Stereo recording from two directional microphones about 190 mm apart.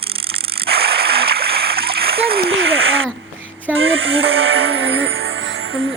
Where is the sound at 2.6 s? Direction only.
90° right.